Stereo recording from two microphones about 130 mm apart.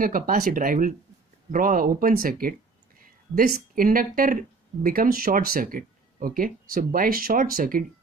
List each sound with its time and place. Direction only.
0.0 s speech: 90° right